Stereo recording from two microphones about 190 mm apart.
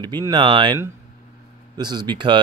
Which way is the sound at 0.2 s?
25° right (ahead or behind).